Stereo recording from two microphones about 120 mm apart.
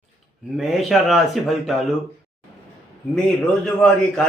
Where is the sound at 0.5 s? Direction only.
Centre (ahead or behind).